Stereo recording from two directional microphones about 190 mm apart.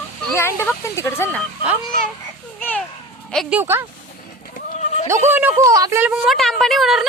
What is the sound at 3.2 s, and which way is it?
Speech, centre (ahead or behind).